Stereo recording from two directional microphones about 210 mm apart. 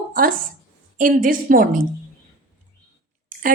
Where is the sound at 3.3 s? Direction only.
40° right (ahead or behind).